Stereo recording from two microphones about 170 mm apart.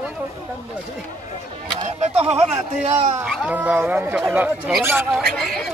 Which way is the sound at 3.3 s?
10° right (ahead or behind).